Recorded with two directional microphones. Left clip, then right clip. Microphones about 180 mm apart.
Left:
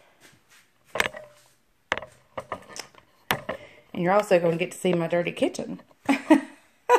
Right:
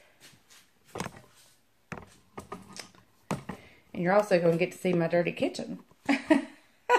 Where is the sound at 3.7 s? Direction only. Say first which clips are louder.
Left 3 dB; 45° left (ahead or behind).